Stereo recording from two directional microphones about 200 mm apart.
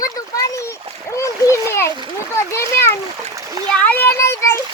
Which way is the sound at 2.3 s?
15° left (ahead or behind).